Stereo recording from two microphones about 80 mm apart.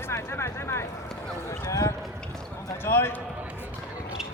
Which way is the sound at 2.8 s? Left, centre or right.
Left.